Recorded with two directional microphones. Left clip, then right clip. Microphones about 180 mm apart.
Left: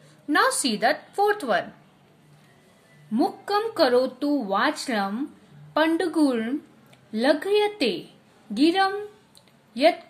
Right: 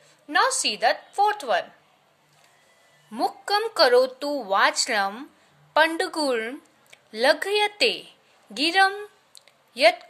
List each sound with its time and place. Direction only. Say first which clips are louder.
0.3 s a woman's voice: even; 15° right (ahead or behind)
3.1 s a woman's voice: even; 30° right (ahead or behind)